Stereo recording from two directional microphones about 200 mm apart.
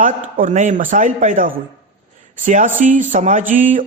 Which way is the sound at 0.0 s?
40° right (ahead or behind).